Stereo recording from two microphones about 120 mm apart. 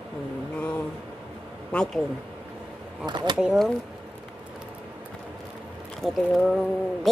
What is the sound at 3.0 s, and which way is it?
Speech, 40° right (ahead or behind).